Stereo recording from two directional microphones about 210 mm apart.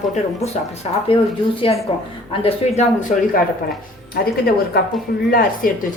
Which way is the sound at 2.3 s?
30° left (ahead or behind).